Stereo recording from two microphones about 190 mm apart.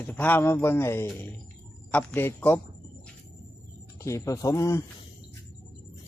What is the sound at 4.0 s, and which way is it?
Speech, 15° left (ahead or behind).